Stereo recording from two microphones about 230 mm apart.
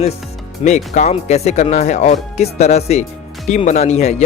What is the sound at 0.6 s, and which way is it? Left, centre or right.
Speech, left.